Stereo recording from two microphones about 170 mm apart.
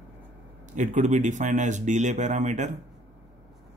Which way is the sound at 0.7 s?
45° right (ahead or behind).